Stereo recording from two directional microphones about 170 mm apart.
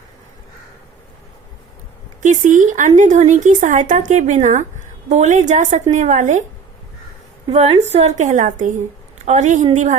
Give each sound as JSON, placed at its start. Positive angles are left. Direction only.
{"t": 2.2, "sound": "speech", "side_deg": -45}
{"t": 7.5, "sound": "a woman's voice", "side_deg": -35}